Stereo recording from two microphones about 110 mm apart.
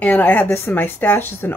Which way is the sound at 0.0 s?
15° left (ahead or behind).